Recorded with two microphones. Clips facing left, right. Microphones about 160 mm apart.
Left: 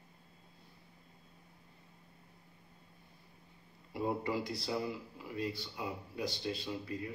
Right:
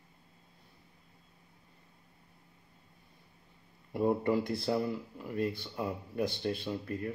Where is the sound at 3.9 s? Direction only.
55° right (ahead or behind).